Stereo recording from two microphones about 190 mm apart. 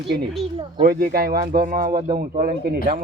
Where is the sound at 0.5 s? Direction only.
30° right (ahead or behind).